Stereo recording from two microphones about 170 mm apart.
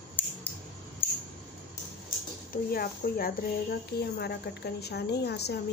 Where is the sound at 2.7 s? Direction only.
60° left (ahead or behind).